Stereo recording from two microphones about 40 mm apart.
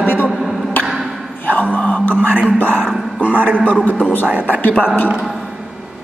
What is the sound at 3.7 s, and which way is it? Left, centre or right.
Speech, left.